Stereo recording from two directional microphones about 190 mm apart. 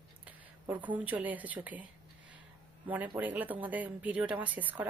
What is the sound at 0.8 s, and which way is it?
Speech, 10° right (ahead or behind).